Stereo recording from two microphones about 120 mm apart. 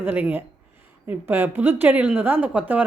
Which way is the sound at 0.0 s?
15° right (ahead or behind).